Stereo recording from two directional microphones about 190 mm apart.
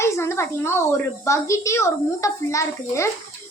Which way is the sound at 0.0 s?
15° left (ahead or behind).